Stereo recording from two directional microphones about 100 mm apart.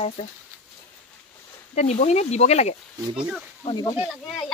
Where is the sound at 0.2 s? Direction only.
90° left.